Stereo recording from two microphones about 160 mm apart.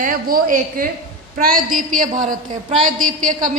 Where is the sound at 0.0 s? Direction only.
60° right (ahead or behind).